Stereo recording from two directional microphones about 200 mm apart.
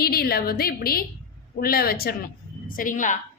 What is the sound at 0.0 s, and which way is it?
A woman's voice, 50° left (ahead or behind).